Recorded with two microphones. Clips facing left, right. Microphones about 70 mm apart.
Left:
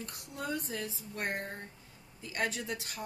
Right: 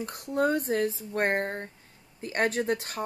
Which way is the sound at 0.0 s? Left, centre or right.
Right.